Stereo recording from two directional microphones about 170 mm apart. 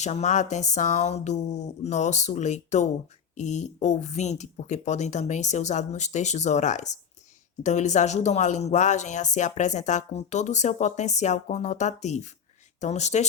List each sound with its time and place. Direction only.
0.0 s speech: 45° left (ahead or behind)